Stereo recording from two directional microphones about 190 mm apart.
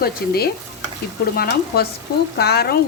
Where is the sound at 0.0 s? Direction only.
55° left (ahead or behind).